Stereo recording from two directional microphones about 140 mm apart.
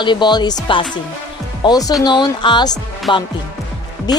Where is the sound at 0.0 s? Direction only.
35° left (ahead or behind).